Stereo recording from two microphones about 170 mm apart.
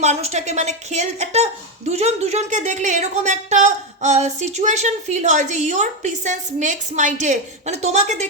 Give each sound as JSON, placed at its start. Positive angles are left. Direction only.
{"t": 0.0, "sound": "speech", "side_deg": -40}